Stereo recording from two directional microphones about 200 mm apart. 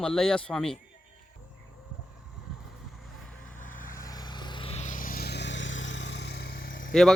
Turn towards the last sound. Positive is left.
turn(degrees=45)  # may be behind; listen again after turning